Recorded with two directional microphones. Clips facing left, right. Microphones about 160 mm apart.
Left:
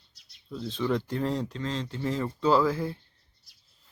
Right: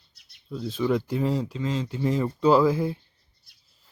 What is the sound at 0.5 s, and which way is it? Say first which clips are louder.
Speech: right 4 dB; 5° right (ahead or behind).